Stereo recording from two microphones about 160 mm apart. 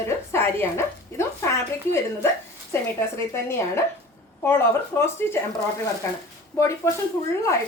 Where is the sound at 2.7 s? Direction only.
15° left (ahead or behind).